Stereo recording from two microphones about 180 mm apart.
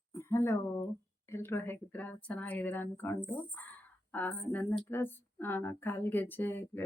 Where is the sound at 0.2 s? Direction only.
15° left (ahead or behind).